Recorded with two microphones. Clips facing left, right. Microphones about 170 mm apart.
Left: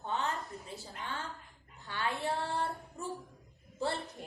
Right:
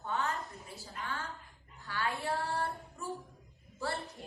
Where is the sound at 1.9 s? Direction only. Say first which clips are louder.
Even; 25° left (ahead or behind).